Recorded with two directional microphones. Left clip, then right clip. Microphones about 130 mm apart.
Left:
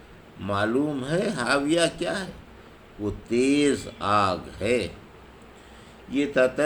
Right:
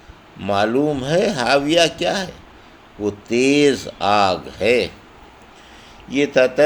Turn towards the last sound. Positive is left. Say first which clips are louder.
# right 7 dB
turn(degrees=-45)  # may be behind; listen again after turning